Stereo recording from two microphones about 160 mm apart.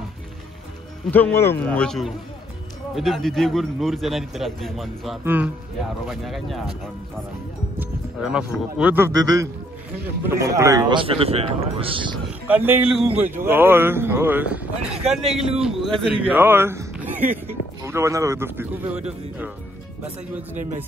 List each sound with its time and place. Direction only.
1.1 s a man's voice: 15° left (ahead or behind)
5.2 s speech: 10° right (ahead or behind)
6.0 s a man's voice: centre (ahead or behind)
7.8 s speech: 5° right (ahead or behind); by 12.2 s 30° right (ahead or behind)
12.4 s speech: 10° right (ahead or behind)